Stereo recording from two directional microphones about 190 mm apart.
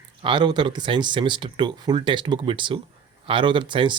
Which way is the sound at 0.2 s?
25° right (ahead or behind).